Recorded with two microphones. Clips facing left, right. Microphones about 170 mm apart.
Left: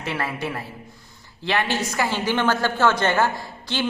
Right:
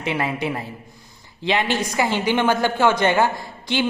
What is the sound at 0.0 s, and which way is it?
A woman's voice, 15° right (ahead or behind).